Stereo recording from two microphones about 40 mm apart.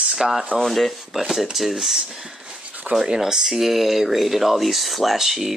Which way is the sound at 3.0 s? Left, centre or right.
Centre.